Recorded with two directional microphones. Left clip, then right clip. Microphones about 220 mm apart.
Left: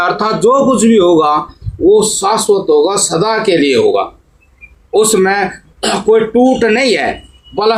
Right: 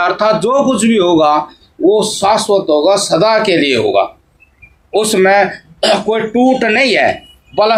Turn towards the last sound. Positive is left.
turn(degrees=-35)  # may be behind; listen again after turning